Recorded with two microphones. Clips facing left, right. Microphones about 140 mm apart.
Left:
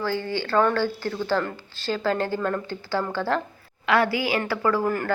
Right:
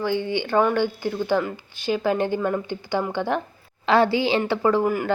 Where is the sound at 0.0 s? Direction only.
20° right (ahead or behind).